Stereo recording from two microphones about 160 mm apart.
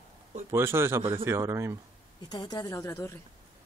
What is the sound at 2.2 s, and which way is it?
Speech, 25° left (ahead or behind).